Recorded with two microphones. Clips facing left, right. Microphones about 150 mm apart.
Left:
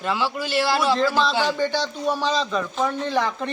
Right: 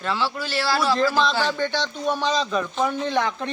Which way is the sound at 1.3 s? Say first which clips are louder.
Left 2 dB; 10° left (ahead or behind).